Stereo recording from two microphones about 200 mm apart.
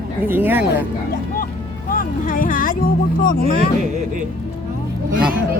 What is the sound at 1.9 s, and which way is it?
Music, 45° left (ahead or behind).